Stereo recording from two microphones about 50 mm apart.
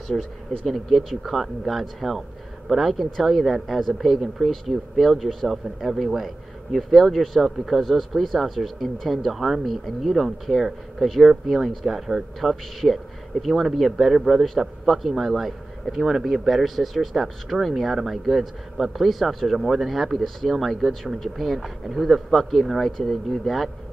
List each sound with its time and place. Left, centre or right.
0.1 s speech: centre